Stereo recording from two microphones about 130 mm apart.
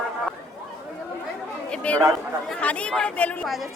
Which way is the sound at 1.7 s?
10° left (ahead or behind).